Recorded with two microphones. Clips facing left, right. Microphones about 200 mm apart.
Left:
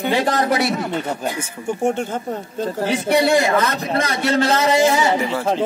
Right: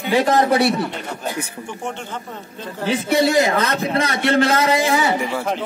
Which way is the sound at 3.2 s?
45° right (ahead or behind).